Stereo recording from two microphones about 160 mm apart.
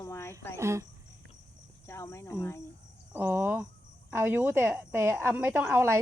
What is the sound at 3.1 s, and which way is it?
A woman's voice, 10° right (ahead or behind).